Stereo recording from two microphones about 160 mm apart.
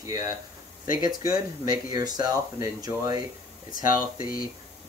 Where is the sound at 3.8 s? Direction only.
60° left (ahead or behind).